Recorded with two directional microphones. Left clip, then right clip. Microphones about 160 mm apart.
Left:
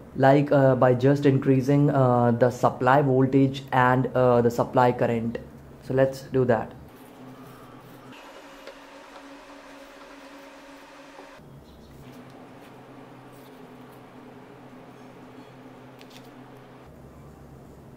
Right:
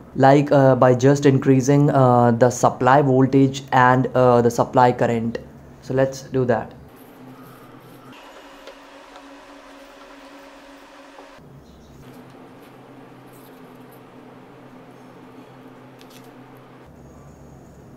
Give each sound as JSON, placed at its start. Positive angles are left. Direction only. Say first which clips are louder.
{"t": 0.2, "sound": "speech", "louder": "right 5 dB", "side_deg": -15}